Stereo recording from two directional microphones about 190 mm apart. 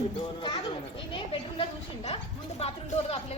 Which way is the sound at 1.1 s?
30° left (ahead or behind).